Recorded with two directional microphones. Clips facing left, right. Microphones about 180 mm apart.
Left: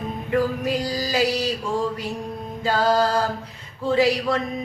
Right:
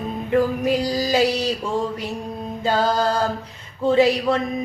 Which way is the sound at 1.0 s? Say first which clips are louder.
Right 4 dB; 25° right (ahead or behind).